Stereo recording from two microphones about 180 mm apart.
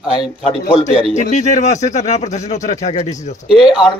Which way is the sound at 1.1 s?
40° left (ahead or behind).